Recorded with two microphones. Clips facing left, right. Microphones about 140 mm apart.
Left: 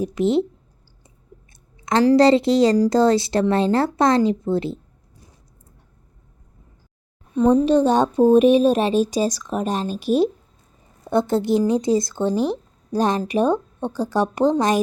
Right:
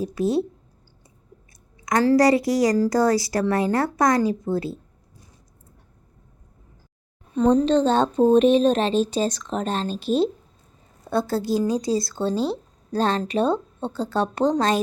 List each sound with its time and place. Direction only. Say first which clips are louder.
0.0 s speech: left 3 dB; 20° left (ahead or behind)
1.8 s speech: left 3 dB; 25° left (ahead or behind)
7.3 s speech: left 2 dB; 10° left (ahead or behind)